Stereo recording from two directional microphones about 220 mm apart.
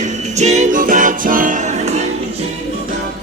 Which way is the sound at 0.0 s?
30° right (ahead or behind).